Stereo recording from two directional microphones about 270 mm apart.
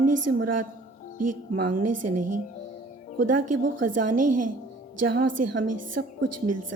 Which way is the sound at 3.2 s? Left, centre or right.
Right.